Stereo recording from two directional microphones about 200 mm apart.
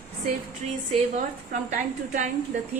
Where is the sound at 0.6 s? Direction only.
35° right (ahead or behind).